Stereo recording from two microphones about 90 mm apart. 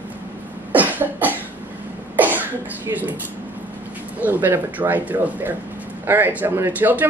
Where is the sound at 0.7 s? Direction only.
20° right (ahead or behind).